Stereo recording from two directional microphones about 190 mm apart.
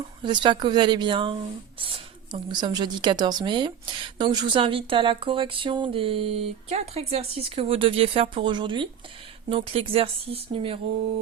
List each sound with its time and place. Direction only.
0.2 s a woman's voice: 25° right (ahead or behind)